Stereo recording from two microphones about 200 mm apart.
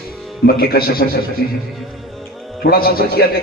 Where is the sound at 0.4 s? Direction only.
50° left (ahead or behind).